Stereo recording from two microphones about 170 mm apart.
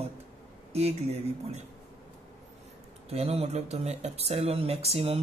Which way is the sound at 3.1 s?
40° right (ahead or behind).